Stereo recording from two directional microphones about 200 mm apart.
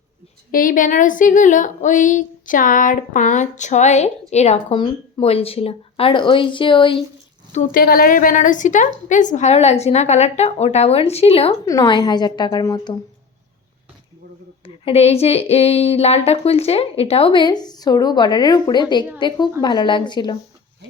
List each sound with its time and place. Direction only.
0.5 s a woman's voice: 45° left (ahead or behind); by 7.0 s 25° left (ahead or behind)
7.5 s a woman's voice: 40° left (ahead or behind)
11.6 s speech: 15° left (ahead or behind)
14.6 s speech: 30° left (ahead or behind)